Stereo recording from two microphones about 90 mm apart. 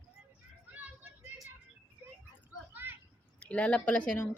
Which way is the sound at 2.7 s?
25° right (ahead or behind).